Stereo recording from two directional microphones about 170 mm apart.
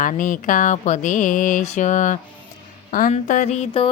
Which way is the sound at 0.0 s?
50° left (ahead or behind).